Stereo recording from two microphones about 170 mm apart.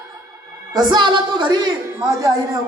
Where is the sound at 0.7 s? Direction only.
25° right (ahead or behind).